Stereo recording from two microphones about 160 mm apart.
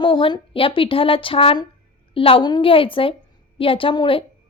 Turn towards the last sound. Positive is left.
turn(degrees=30)  # may be behind; listen again after turning